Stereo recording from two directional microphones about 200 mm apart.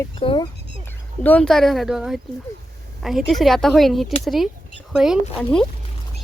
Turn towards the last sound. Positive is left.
turn(degrees=5)  # may be behind; listen again after turning